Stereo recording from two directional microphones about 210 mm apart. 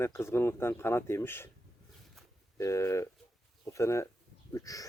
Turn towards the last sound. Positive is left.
turn(degrees=15)  # may be behind; listen again after turning